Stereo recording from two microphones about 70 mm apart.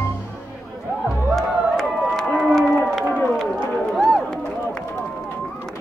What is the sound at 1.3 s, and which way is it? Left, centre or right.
Crowd, centre.